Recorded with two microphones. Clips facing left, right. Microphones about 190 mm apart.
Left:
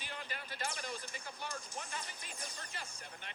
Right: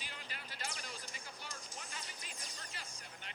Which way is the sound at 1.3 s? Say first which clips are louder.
Left 6 dB; 55° left (ahead or behind).